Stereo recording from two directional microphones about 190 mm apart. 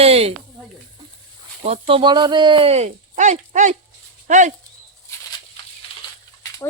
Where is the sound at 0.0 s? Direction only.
30° right (ahead or behind).